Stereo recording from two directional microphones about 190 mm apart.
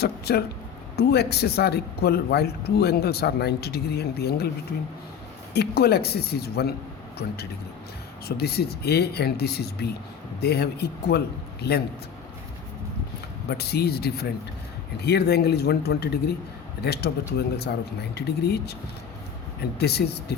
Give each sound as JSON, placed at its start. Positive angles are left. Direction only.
{"t": 0.0, "sound": "a man's voice", "side_deg": 55}
{"t": 5.5, "sound": "a man's voice", "side_deg": 55}
{"t": 8.4, "sound": "a man's voice", "side_deg": 55}
{"t": 13.5, "sound": "a man's voice", "side_deg": 55}
{"t": 19.8, "sound": "a man's voice", "side_deg": 60}